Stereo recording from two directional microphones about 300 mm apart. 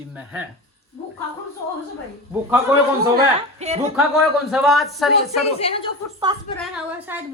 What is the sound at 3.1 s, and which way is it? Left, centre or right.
Speech, right.